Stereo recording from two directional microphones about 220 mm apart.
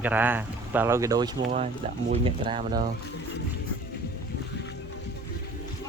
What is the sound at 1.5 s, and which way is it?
Speech, 30° right (ahead or behind).